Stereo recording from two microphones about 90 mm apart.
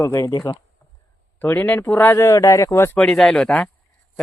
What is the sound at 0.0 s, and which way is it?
Speech, 35° left (ahead or behind).